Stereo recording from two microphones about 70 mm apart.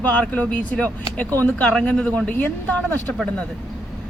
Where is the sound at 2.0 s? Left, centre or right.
Centre.